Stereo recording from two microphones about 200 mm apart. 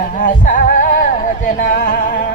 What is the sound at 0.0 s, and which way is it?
Music, 40° left (ahead or behind).